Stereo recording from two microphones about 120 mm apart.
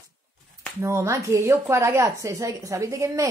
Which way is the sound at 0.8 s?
25° right (ahead or behind).